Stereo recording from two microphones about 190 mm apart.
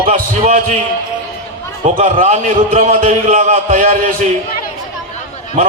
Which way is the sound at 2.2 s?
40° right (ahead or behind).